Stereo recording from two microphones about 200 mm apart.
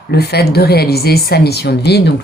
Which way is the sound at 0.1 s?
55° left (ahead or behind).